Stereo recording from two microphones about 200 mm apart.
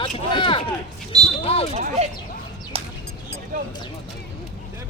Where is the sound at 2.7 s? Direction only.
30° right (ahead or behind).